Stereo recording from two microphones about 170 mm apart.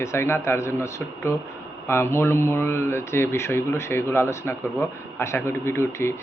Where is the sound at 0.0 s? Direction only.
15° left (ahead or behind).